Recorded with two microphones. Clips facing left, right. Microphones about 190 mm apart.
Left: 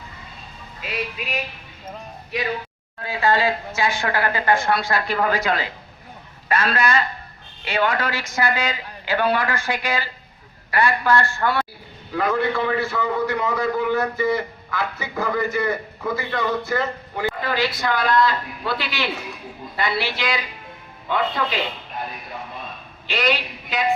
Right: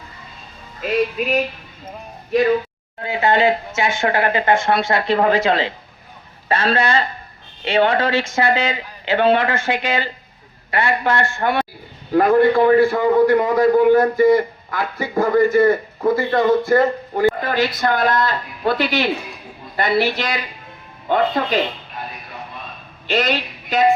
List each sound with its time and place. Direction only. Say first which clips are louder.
0.8 s a man's voice: right 10 dB; 45° right (ahead or behind)
3.0 s a woman's voice: right 4 dB; 20° right (ahead or behind)
12.1 s a man's voice: right 8 dB; 50° right (ahead or behind)
23.0 s a man's voice: right 3 dB; 45° right (ahead or behind)